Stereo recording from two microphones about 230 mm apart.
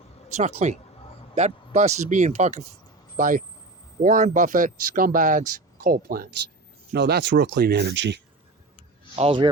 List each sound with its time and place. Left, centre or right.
0.3 s speech: right
9.1 s speech: right